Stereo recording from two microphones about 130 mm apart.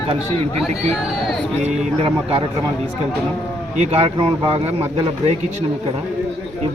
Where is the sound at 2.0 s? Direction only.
45° right (ahead or behind).